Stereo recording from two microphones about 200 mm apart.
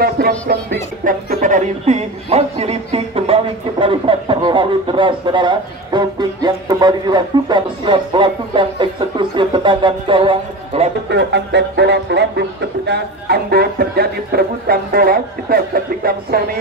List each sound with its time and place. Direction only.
0.0 s music: 50° right (ahead or behind); by 10.9 s 25° right (ahead or behind)
11.1 s speech: 60° right (ahead or behind)